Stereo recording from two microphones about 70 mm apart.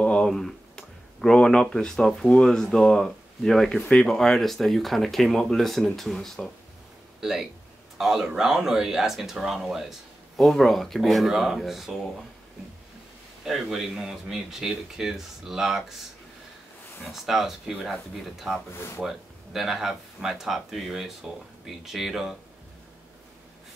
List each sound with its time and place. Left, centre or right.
0.0 s tick-tock: centre
0.3 s speech: centre
7.2 s speech: centre
13.5 s speech: centre
17.0 s speech: centre
18.7 s speech: left
18.9 s speech: centre